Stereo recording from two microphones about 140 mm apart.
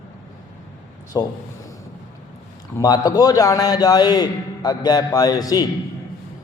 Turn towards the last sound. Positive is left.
turn(degrees=25)  # may be behind; listen again after turning